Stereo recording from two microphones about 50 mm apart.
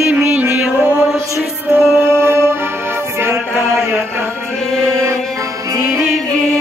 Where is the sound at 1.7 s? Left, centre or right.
Right.